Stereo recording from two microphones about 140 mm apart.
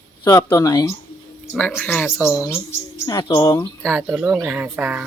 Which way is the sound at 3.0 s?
30° left (ahead or behind).